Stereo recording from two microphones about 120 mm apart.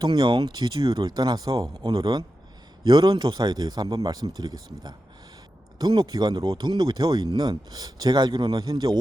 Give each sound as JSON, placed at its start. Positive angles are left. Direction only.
{"t": 0.0, "sound": "speech", "side_deg": -40}
{"t": 0.8, "sound": "speech", "side_deg": -50}
{"t": 1.0, "sound": "speech", "side_deg": -35}